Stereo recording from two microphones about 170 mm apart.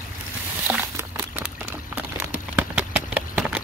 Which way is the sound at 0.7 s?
10° right (ahead or behind).